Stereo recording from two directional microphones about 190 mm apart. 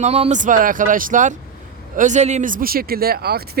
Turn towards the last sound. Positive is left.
turn(degrees=-55)  # may be behind; listen again after turning